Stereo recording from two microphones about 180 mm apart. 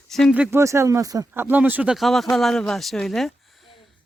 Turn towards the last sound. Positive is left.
turn(degrees=0)  # may be behind; listen again after turning